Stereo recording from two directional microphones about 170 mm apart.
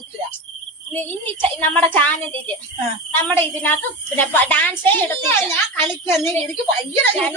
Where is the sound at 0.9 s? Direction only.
10° left (ahead or behind).